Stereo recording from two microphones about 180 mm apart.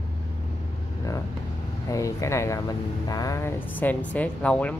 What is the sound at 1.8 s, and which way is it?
Speech, 15° left (ahead or behind).